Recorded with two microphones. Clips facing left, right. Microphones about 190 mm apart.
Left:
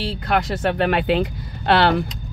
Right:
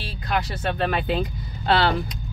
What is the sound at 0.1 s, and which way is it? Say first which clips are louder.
Speech: left 2 dB; 65° left (ahead or behind).